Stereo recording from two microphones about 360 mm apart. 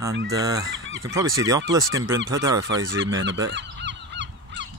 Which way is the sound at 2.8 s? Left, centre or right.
Right.